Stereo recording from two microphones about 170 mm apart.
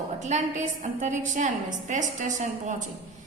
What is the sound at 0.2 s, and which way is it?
A woman's voice, 45° right (ahead or behind).